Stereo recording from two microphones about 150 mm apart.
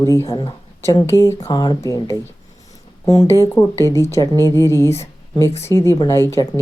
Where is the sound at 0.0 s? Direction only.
20° left (ahead or behind).